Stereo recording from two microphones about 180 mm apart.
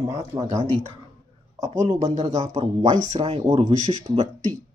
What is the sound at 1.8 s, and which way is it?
Speech, 40° right (ahead or behind).